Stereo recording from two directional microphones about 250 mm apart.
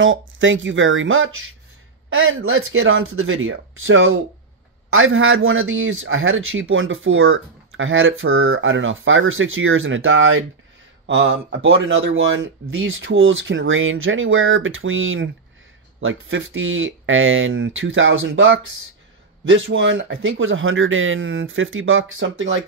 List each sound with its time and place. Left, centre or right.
0.0 s speech: right